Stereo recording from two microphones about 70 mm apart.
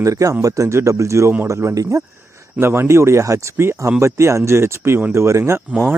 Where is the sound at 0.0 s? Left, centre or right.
Right.